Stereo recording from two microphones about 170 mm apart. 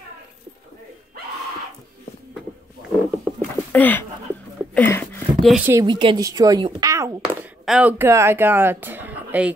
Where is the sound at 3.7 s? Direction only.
10° left (ahead or behind).